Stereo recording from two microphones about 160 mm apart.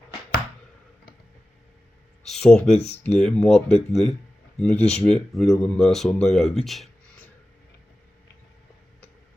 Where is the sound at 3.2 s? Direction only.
Centre (ahead or behind).